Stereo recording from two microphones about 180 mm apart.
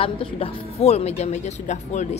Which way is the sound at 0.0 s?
30° left (ahead or behind).